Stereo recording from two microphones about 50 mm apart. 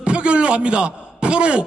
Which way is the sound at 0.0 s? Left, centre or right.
Right.